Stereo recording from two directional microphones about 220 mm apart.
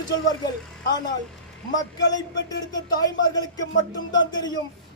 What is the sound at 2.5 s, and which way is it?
Speech, 15° left (ahead or behind).